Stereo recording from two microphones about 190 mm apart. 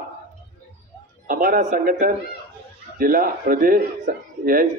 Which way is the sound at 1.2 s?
50° right (ahead or behind).